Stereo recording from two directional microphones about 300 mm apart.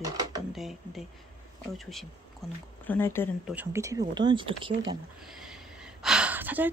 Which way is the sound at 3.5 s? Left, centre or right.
Centre.